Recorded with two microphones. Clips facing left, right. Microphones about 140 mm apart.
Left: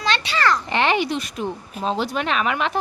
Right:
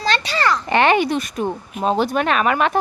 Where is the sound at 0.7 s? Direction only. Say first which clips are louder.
Right 5 dB; 55° right (ahead or behind).